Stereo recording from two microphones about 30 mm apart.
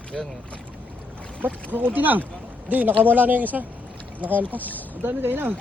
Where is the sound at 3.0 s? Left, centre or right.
Right.